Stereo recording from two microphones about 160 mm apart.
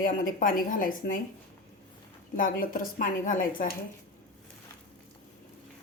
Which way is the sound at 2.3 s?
60° left (ahead or behind).